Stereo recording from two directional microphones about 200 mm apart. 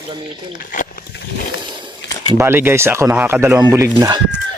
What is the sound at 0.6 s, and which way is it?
Speech, 40° left (ahead or behind).